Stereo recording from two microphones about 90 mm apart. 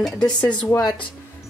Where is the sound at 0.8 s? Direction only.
60° left (ahead or behind).